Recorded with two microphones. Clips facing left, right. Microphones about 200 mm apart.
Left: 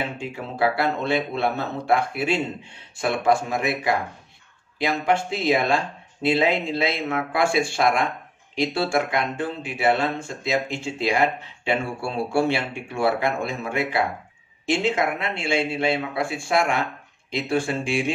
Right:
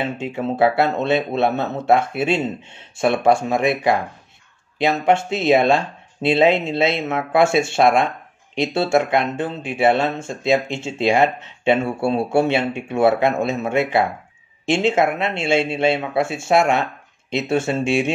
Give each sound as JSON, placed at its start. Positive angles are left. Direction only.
{"t": 0.2, "sound": "speech", "side_deg": -25}